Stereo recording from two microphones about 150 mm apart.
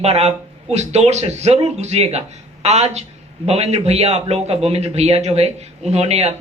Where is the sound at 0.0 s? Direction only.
45° right (ahead or behind).